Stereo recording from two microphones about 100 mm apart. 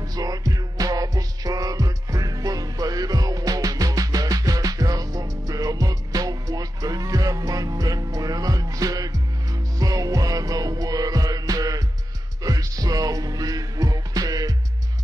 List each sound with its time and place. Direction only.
0.0 s music: 40° right (ahead or behind)